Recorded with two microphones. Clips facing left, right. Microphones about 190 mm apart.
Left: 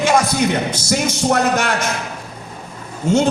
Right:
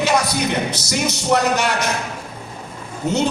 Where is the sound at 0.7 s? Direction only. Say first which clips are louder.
Left 3 dB; 50° left (ahead or behind).